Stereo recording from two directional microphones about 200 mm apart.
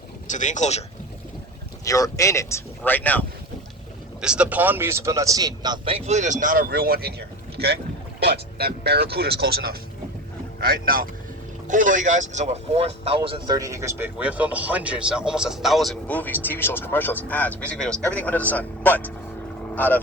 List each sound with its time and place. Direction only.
0.3 s speech: 40° left (ahead or behind)
1.8 s speech: 15° left (ahead or behind)
4.2 s speech: 5° right (ahead or behind)